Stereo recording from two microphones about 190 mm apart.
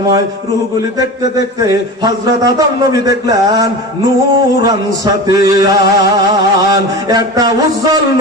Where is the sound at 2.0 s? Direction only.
20° right (ahead or behind).